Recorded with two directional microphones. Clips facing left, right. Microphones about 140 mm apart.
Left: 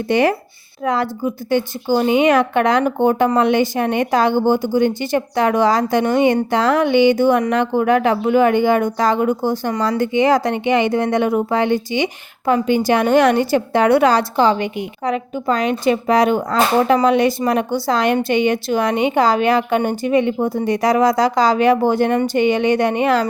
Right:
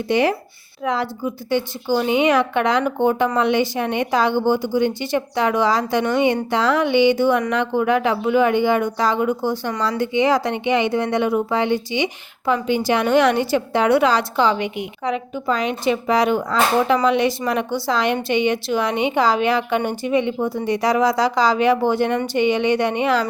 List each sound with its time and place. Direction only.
0.1 s a woman's voice: 50° left (ahead or behind)